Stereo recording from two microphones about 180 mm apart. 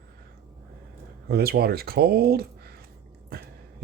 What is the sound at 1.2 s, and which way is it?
Speech, 60° right (ahead or behind).